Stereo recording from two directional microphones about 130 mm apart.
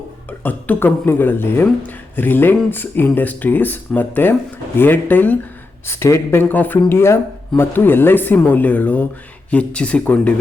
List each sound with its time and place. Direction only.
0.3 s speech: 15° left (ahead or behind)